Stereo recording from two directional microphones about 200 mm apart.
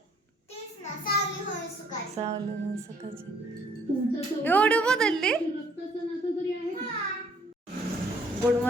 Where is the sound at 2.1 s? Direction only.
30° right (ahead or behind).